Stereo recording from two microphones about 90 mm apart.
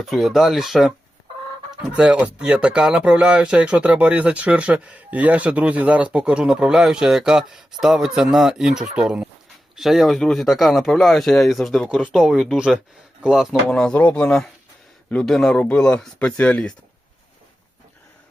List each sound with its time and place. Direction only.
0.0 s speech: centre (ahead or behind)
2.0 s speech: 15° right (ahead or behind)
13.7 s speech: 10° left (ahead or behind)